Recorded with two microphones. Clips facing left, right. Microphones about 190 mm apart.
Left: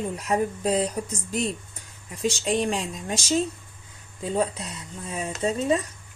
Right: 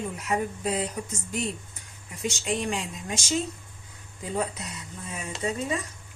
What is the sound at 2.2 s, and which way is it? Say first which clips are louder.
Speech: left 5 dB; 35° left (ahead or behind).